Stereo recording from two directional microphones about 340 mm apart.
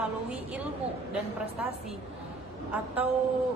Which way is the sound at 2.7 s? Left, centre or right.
Centre.